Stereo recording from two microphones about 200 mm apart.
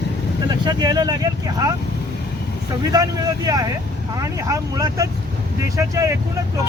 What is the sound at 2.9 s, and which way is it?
Speech, 20° right (ahead or behind).